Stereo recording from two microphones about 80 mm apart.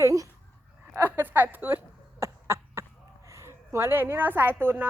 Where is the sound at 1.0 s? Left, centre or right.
Right.